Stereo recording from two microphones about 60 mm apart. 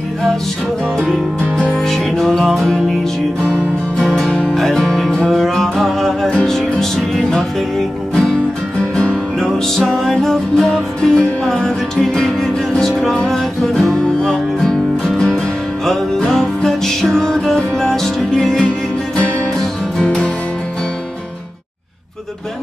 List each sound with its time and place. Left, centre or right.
0.9 s music: centre
4.6 s music: centre
9.4 s music: centre